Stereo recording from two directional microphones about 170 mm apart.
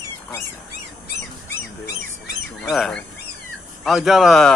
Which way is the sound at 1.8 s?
80° left.